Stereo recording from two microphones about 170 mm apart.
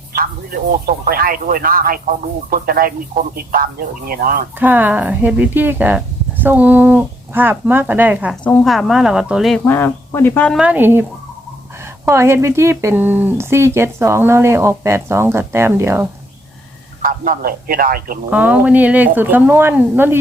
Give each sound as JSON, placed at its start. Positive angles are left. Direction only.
{"t": 0.1, "sound": "speech", "side_deg": -60}
{"t": 4.6, "sound": "speech", "side_deg": -10}
{"t": 6.4, "sound": "a sound", "side_deg": -10}
{"t": 7.7, "sound": "speech", "side_deg": -10}
{"t": 9.6, "sound": "speech", "side_deg": 10}
{"t": 10.6, "sound": "speech", "side_deg": -10}
{"t": 12.0, "sound": "speech", "side_deg": -15}
{"t": 17.0, "sound": "speech", "side_deg": -55}
{"t": 18.3, "sound": "speech", "side_deg": -10}